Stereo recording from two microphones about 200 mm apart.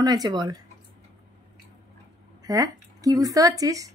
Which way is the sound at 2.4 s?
20° right (ahead or behind).